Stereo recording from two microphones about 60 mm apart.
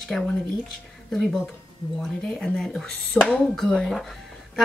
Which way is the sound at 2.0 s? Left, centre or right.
Centre.